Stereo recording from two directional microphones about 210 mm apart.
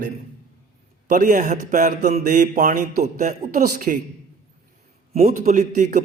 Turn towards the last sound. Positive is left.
turn(degrees=-35)  # may be behind; listen again after turning